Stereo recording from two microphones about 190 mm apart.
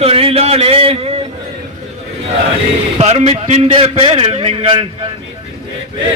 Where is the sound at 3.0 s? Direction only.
35° right (ahead or behind).